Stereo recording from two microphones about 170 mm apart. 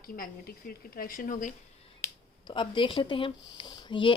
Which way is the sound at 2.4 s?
30° left (ahead or behind).